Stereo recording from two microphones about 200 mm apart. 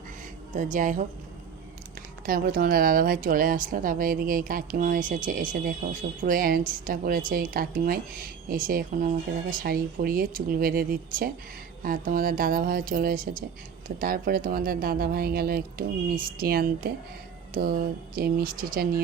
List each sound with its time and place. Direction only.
0.5 s speech: 40° right (ahead or behind)